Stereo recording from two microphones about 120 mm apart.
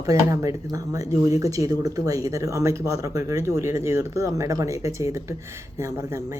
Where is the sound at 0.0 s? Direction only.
25° right (ahead or behind).